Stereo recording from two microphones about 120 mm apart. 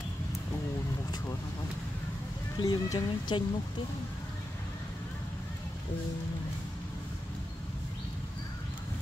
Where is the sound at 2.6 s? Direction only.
35° left (ahead or behind).